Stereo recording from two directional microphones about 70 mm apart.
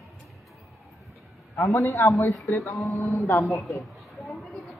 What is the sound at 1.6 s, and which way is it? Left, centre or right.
Speech, left.